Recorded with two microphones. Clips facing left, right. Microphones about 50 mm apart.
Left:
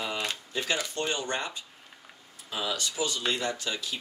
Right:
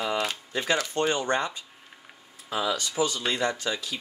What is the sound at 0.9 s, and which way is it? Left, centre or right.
Speech, right.